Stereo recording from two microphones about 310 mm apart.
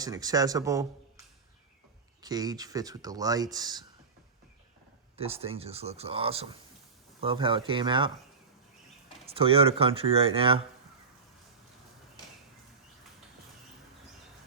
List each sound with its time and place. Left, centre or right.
0.0 s speech: centre
2.2 s speech: centre
5.1 s speech: centre
9.2 s speech: centre